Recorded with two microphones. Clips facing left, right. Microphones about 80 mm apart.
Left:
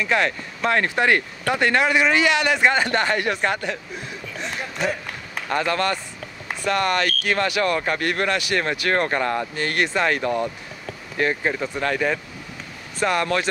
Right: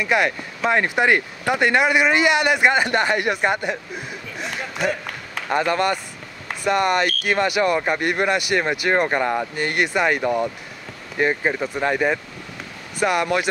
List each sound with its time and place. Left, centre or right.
0.0 s speech: centre
4.4 s run: centre
5.6 s speech: centre